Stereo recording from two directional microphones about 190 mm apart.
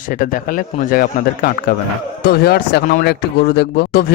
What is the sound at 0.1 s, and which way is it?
Speech, 45° left (ahead or behind).